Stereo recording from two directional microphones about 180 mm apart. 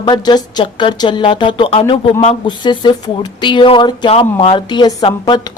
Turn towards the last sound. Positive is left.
turn(degrees=25)  # may be behind; listen again after turning